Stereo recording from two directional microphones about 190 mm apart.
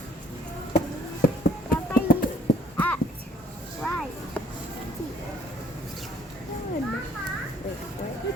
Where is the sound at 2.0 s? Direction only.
50° left (ahead or behind).